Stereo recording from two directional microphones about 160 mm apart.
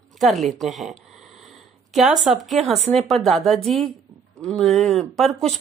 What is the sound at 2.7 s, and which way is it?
Speech, 40° right (ahead or behind).